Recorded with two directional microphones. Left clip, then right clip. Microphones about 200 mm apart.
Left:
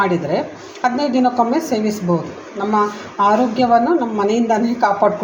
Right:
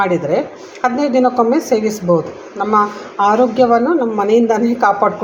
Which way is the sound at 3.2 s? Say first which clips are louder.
Right 3 dB; 20° right (ahead or behind).